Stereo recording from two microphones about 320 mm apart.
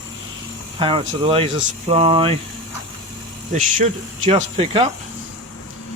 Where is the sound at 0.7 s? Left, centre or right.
Centre.